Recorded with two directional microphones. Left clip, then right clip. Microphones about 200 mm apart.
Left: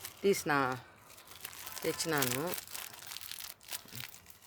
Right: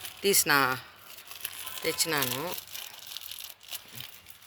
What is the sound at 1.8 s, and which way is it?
Speech, 30° left (ahead or behind).